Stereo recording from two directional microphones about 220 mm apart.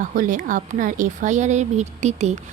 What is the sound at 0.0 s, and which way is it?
Speech, 40° right (ahead or behind).